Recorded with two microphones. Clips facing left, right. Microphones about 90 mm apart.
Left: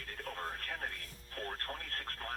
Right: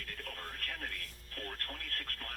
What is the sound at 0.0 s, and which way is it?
Radio, 25° left (ahead or behind).